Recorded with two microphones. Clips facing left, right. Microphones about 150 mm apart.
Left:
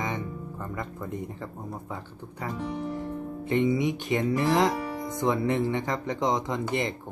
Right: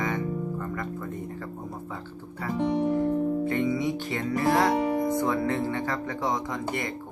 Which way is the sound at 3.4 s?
20° left (ahead or behind).